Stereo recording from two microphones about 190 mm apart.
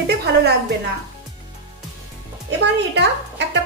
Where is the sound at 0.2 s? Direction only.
60° right (ahead or behind).